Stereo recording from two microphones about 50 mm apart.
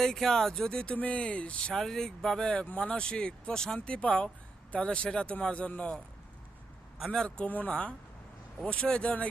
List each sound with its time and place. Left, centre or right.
0.0 s speech: centre; by 1.7 s left
1.7 s speech: centre
3.8 s speech: left
7.1 s speech: centre
7.4 s speech: left
7.7 s speech: left